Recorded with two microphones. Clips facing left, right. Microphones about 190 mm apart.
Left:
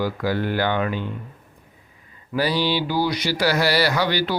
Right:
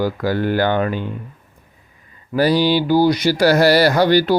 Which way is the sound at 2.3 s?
45° right (ahead or behind).